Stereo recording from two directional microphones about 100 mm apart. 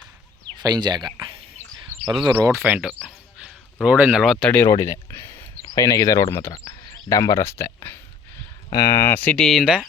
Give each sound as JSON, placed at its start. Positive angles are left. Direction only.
{"t": 0.5, "sound": "speech", "side_deg": -45}
{"t": 2.4, "sound": "speech", "side_deg": -30}
{"t": 2.6, "sound": "speech", "side_deg": -10}
{"t": 3.4, "sound": "a sound", "side_deg": -10}
{"t": 4.2, "sound": "speech", "side_deg": 0}
{"t": 4.7, "sound": "speech", "side_deg": 30}
{"t": 5.6, "sound": "speech", "side_deg": 35}
{"t": 9.3, "sound": "speech", "side_deg": 5}